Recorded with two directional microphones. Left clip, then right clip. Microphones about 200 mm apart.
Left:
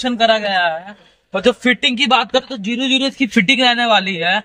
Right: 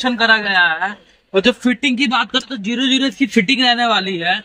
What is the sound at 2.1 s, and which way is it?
A man's voice, 45° left (ahead or behind).